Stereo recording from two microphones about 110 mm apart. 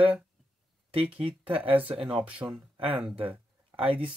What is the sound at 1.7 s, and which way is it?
Speech, 10° right (ahead or behind).